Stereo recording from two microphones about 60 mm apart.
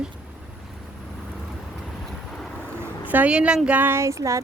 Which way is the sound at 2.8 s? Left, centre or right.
Right.